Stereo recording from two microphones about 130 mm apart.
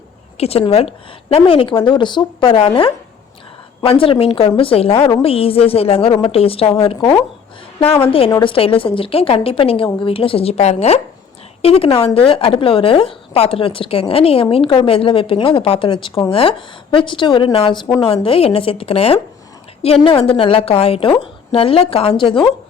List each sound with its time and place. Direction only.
0.3 s a woman's voice: 50° left (ahead or behind)
8.0 s a woman's voice: 45° left (ahead or behind)